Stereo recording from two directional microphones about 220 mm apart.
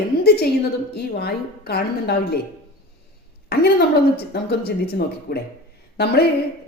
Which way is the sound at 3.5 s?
45° left (ahead or behind).